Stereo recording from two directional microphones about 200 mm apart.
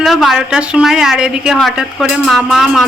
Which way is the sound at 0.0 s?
Centre (ahead or behind).